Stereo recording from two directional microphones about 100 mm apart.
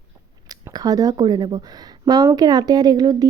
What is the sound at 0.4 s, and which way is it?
Speech, 40° right (ahead or behind).